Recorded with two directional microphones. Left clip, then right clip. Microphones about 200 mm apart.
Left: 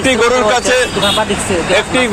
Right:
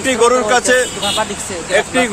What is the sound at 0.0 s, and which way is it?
Speech, 20° right (ahead or behind).